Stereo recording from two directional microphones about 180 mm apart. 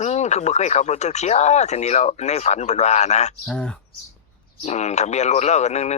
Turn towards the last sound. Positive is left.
turn(degrees=40)  # may be behind; listen again after turning